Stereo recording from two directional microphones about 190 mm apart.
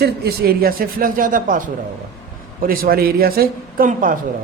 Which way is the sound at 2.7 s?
50° right (ahead or behind).